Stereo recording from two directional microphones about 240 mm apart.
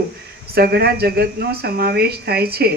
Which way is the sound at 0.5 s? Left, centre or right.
Right.